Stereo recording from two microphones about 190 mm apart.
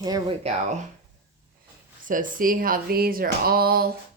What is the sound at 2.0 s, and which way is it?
Speech, 45° right (ahead or behind).